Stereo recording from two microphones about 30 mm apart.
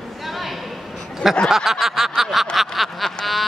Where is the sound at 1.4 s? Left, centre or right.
Centre.